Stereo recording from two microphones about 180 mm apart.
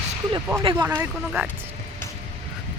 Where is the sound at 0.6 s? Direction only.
30° right (ahead or behind).